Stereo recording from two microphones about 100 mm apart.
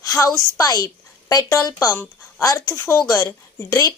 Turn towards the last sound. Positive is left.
turn(degrees=20)  # may be behind; listen again after turning